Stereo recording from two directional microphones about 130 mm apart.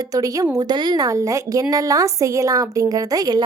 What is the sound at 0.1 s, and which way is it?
A woman's voice, 25° right (ahead or behind).